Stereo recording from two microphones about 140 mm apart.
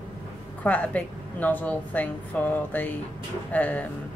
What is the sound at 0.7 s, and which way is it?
Speech, 10° left (ahead or behind).